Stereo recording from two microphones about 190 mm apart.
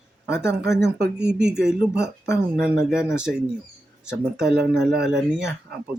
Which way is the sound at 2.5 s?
Centre (ahead or behind).